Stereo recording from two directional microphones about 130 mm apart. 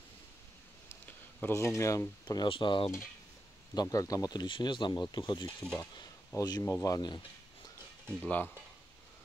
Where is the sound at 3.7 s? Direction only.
30° left (ahead or behind).